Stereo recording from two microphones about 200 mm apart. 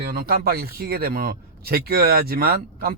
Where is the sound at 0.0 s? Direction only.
50° right (ahead or behind).